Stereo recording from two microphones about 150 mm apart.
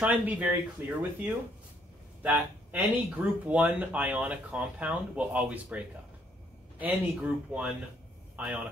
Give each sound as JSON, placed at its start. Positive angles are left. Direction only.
{"t": 0.0, "sound": "speech", "side_deg": -10}
{"t": 6.8, "sound": "speech", "side_deg": -10}